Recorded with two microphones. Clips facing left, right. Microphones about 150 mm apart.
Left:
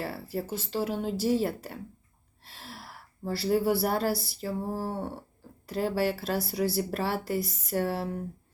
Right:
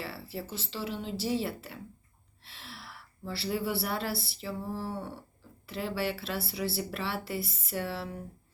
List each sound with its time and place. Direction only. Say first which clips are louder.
0.0 s speech: left 5 dB; 45° left (ahead or behind)